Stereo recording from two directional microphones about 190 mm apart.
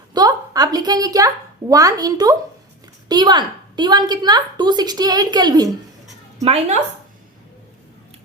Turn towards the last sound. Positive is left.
turn(degrees=-35)  # may be behind; listen again after turning